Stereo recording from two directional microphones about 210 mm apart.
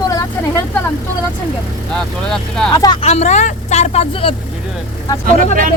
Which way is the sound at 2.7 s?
20° left (ahead or behind).